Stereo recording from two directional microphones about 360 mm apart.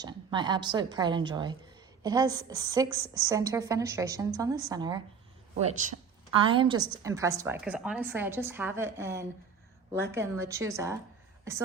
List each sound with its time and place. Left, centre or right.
0.0 s a woman's voice: centre